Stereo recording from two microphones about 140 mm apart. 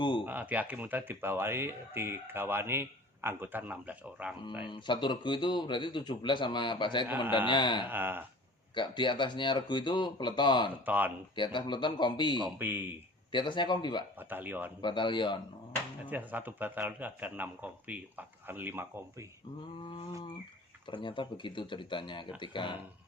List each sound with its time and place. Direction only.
0.0 s a sound: 35° left (ahead or behind)
0.3 s speech: 10° right (ahead or behind)
4.6 s speech: 35° left (ahead or behind)
7.9 s speech: 15° right (ahead or behind)
8.7 s speech: 35° left (ahead or behind)
10.8 s speech: 10° right (ahead or behind)
11.3 s speech: 35° left (ahead or behind)
12.5 s speech: 15° right (ahead or behind)
13.3 s speech: 35° left (ahead or behind)
14.2 s speech: 15° right (ahead or behind)
14.8 s speech: 35° left (ahead or behind)
16.0 s speech: 10° right (ahead or behind)
20.8 s speech: 35° left (ahead or behind)